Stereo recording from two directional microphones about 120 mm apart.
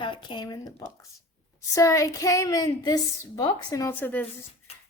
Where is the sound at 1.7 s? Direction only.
25° left (ahead or behind).